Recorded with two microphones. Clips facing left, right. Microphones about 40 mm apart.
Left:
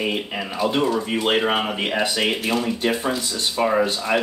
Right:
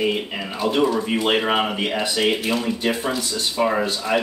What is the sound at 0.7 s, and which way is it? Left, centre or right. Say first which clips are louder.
Speech: right 3 dB; centre.